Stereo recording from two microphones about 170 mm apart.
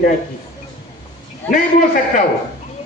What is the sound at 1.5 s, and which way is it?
Speech, 50° left (ahead or behind).